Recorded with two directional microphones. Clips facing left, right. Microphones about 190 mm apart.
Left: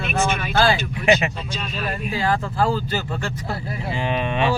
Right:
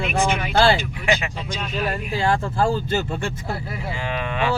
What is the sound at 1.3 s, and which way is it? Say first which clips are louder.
Speech: right 1 dB; 15° right (ahead or behind).